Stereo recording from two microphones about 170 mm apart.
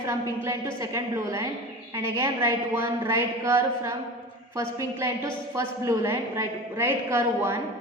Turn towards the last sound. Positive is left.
turn(degrees=-15)  # may be behind; listen again after turning